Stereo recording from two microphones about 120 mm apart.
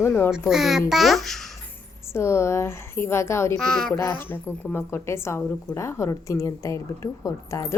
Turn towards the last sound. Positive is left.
turn(degrees=25)  # may be behind; listen again after turning